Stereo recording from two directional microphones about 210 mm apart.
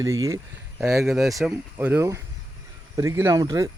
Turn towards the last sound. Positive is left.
turn(degrees=-15)  # may be behind; listen again after turning